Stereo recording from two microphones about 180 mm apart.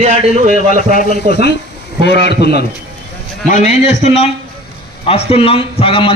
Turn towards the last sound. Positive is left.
turn(degrees=30)  # may be behind; listen again after turning